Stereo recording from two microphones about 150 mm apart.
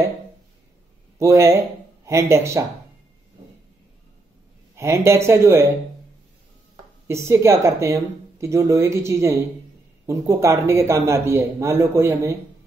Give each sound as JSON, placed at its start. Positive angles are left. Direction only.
{"t": 1.1, "sound": "speech", "side_deg": -20}
{"t": 4.7, "sound": "a man's voice", "side_deg": -20}
{"t": 7.1, "sound": "a man's voice", "side_deg": -20}